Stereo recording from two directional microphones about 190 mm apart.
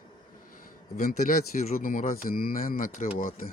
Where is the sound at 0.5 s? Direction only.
45° left (ahead or behind).